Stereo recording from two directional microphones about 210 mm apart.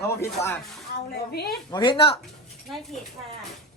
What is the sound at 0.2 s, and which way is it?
Speech, 10° left (ahead or behind).